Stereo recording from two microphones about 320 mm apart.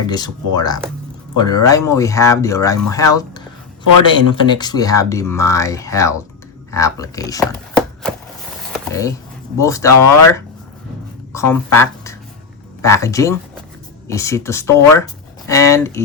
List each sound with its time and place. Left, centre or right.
0.1 s speech: centre
6.7 s chopping: centre
8.6 s a sound: centre
9.6 s speech: centre